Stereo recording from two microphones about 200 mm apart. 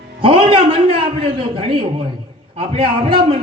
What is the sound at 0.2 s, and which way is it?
A man's voice, 25° right (ahead or behind).